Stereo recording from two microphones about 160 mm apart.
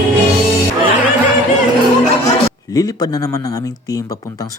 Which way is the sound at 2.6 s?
25° left (ahead or behind).